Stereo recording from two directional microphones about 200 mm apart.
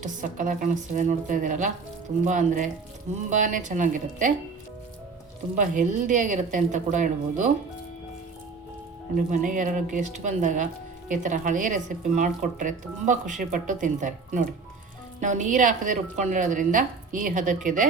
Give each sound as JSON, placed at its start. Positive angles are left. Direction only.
{"t": 0.0, "sound": "speech", "side_deg": -40}
{"t": 5.5, "sound": "speech", "side_deg": -40}
{"t": 9.1, "sound": "speech", "side_deg": -40}